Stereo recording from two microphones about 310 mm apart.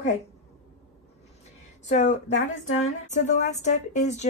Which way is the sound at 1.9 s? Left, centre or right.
Left.